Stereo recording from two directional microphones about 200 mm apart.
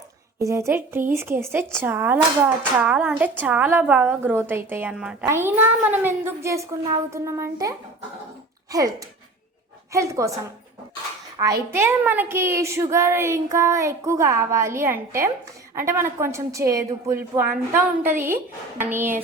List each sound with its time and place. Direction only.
0.3 s a woman's voice: 15° right (ahead or behind)